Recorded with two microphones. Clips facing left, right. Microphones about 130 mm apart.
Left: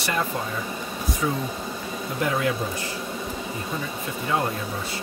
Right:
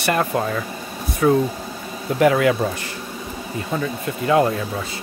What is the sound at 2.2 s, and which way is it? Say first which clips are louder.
Speech: right 9 dB; 75° right (ahead or behind).